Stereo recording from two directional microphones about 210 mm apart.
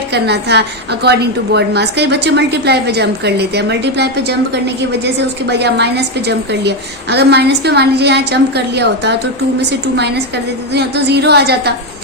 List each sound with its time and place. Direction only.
0.1 s a woman's voice: 50° right (ahead or behind)